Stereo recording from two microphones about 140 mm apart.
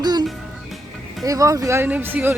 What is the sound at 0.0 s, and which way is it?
Music, 30° right (ahead or behind).